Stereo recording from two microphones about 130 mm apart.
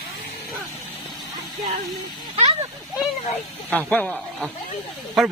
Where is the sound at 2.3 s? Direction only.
45° right (ahead or behind).